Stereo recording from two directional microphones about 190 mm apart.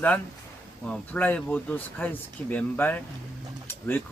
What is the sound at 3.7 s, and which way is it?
Pigeon, 10° left (ahead or behind).